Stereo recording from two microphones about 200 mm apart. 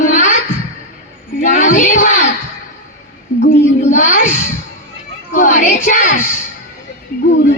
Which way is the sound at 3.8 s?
35° left (ahead or behind).